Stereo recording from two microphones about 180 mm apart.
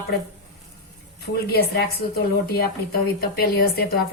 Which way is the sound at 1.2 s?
65° left (ahead or behind).